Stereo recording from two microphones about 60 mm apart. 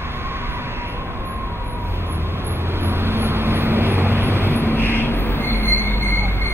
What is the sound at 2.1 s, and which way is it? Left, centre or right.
Vehicle, right.